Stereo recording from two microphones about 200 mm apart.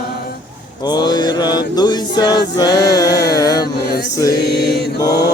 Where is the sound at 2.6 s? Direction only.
20° left (ahead or behind).